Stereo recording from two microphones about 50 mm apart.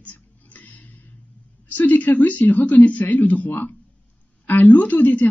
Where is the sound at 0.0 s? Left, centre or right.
Left.